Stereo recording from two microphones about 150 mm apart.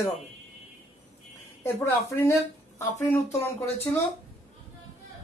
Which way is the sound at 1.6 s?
15° left (ahead or behind).